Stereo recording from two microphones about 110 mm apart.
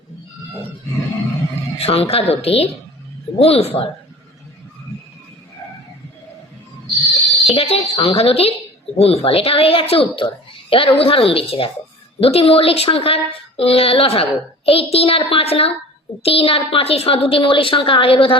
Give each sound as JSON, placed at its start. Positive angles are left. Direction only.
{"t": 1.8, "sound": "a woman's voice", "side_deg": 65}
{"t": 7.4, "sound": "a woman's voice", "side_deg": 60}